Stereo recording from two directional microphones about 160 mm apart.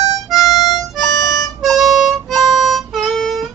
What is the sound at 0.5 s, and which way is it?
Harmonica, 20° left (ahead or behind).